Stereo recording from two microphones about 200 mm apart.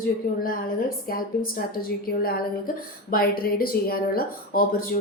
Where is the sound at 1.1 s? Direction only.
45° left (ahead or behind).